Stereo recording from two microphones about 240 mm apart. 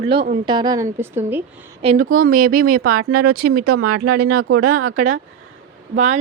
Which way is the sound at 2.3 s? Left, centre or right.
Right.